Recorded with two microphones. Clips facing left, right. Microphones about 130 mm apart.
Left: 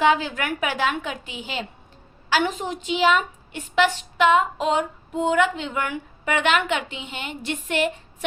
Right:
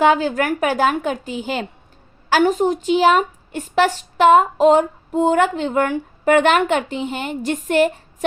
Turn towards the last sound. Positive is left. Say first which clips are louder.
# right 7 dB
turn(degrees=-45)  # may be behind; listen again after turning